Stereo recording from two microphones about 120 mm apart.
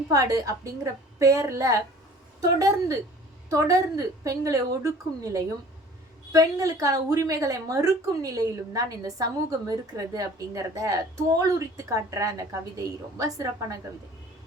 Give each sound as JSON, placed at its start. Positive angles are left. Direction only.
{"t": 0.1, "sound": "a woman's voice", "side_deg": -30}